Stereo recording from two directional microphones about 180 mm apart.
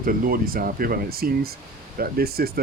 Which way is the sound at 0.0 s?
55° right (ahead or behind).